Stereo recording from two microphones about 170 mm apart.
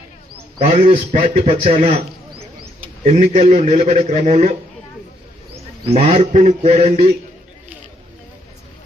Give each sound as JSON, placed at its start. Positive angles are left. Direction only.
{"t": 0.6, "sound": "a man's voice", "side_deg": -35}
{"t": 5.9, "sound": "a man's voice", "side_deg": -35}